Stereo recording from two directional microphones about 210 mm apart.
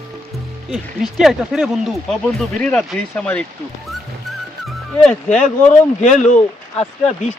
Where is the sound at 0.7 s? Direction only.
Centre (ahead or behind).